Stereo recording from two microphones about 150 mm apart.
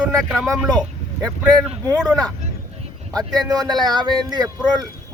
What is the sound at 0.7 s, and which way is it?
Vehicle, 5° left (ahead or behind).